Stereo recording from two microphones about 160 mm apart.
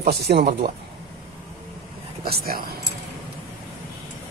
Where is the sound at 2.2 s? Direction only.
70° right (ahead or behind).